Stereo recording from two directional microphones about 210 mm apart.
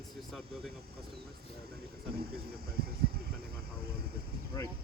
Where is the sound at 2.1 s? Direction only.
45° right (ahead or behind).